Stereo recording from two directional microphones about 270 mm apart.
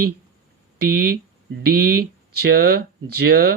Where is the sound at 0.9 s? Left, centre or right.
Right.